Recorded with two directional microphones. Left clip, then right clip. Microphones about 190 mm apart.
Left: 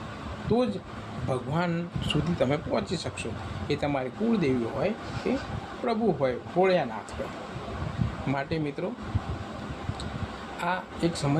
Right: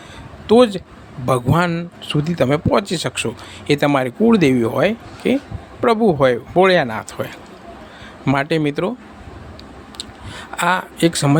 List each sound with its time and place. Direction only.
0.5 s speech: 50° right (ahead or behind)
1.3 s a man's voice: 40° right (ahead or behind)
8.3 s speech: 45° right (ahead or behind)
10.6 s speech: 45° right (ahead or behind)